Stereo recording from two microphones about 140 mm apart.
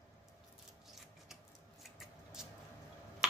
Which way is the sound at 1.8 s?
5° right (ahead or behind).